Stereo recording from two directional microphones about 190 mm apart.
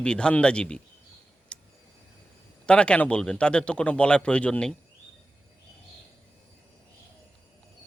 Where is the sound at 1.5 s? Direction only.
5° left (ahead or behind).